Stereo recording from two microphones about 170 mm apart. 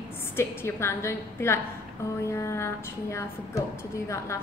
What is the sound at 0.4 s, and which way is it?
A woman's voice, 15° left (ahead or behind).